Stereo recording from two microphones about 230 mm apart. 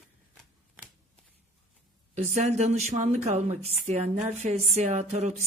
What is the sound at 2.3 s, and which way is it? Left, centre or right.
A woman's voice, right.